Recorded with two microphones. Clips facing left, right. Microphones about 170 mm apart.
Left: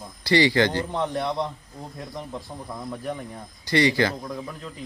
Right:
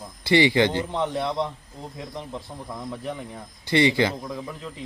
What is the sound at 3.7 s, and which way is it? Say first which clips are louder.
Speech: right 1 dB; 20° right (ahead or behind).